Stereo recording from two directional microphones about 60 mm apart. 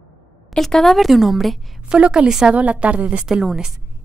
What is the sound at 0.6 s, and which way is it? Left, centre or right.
A woman's voice, centre.